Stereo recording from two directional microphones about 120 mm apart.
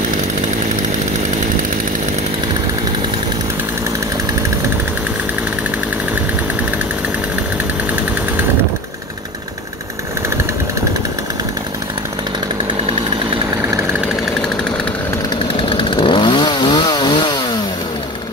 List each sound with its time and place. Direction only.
15.7 s chainsaw: 45° left (ahead or behind)